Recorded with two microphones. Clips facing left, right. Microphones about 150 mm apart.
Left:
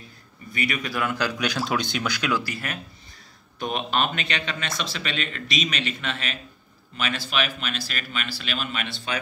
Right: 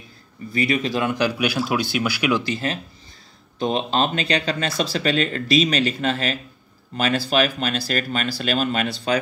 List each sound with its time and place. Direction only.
0.5 s speech: 30° right (ahead or behind)